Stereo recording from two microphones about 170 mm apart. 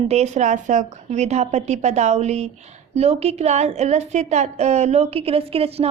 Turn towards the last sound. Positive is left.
turn(degrees=-35)  # may be behind; listen again after turning